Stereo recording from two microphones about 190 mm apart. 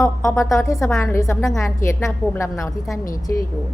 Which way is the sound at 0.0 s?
15° left (ahead or behind).